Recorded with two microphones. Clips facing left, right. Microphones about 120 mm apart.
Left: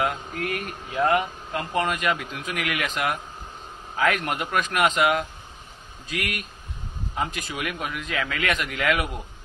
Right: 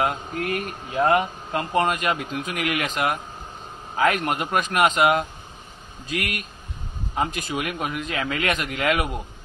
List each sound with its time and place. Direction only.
0.0 s speech: 30° right (ahead or behind)